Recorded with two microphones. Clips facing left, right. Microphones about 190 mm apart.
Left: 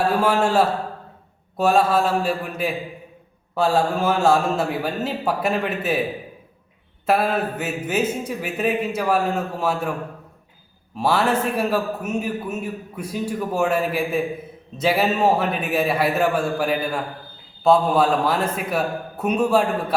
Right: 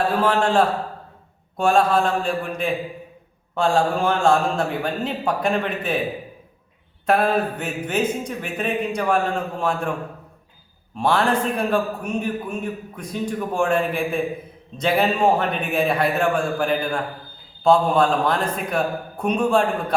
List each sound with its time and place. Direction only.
0.2 s a man's voice: 10° left (ahead or behind)
7.0 s a man's voice: 5° left (ahead or behind)
10.9 s a man's voice: 5° left (ahead or behind)